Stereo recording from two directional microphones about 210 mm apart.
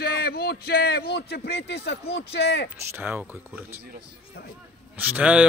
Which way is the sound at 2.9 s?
10° right (ahead or behind).